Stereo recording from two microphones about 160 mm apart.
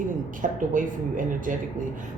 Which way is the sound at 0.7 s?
55° right (ahead or behind).